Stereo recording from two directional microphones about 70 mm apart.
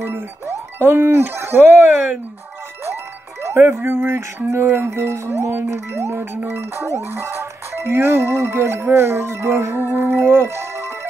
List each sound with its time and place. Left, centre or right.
0.0 s speech: right
3.4 s speech: right
5.5 s speech: right
9.9 s music: right